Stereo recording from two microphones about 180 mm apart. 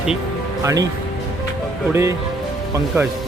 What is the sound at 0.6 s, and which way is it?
Speech, 20° right (ahead or behind).